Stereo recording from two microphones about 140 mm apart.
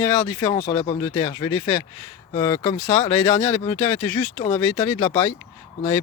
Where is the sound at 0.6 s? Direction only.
40° left (ahead or behind).